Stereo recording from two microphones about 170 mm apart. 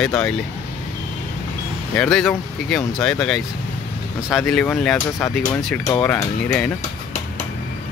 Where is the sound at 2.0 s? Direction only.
5° left (ahead or behind).